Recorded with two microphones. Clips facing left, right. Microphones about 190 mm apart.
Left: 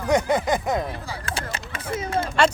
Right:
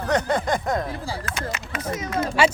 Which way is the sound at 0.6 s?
20° left (ahead or behind).